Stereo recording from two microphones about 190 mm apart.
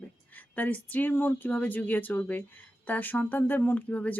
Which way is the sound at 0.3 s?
10° left (ahead or behind).